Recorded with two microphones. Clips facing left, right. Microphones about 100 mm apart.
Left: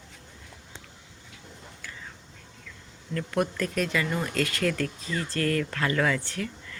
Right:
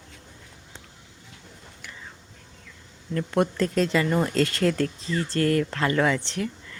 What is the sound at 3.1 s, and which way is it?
Speech, 25° right (ahead or behind).